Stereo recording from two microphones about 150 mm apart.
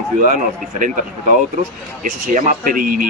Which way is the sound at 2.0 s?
60° right (ahead or behind).